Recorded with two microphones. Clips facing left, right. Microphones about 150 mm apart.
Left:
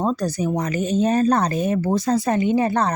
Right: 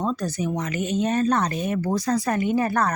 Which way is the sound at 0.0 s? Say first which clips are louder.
Left 4 dB; 35° left (ahead or behind).